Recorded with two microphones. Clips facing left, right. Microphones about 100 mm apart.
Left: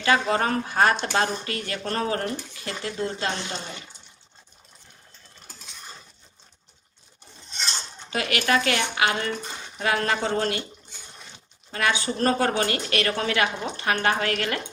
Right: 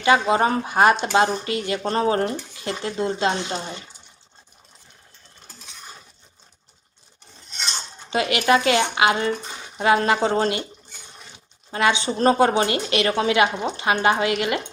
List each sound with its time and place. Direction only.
0.0 s a woman's voice: 20° right (ahead or behind)
8.1 s a woman's voice: 20° right (ahead or behind)
11.7 s a woman's voice: 20° right (ahead or behind)